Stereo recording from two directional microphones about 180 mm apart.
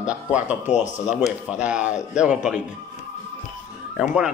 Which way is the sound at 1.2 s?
5° right (ahead or behind).